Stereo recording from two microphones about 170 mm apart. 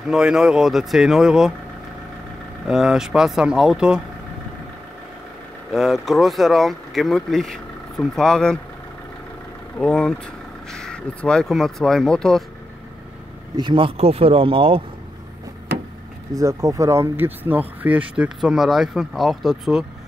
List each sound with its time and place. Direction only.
0.1 s speech: 5° right (ahead or behind)
2.7 s speech: 5° right (ahead or behind)
5.7 s speech: centre (ahead or behind)
9.8 s speech: 5° left (ahead or behind)
13.6 s speech: 30° right (ahead or behind)
16.3 s speech: 20° right (ahead or behind); by 19.8 s centre (ahead or behind)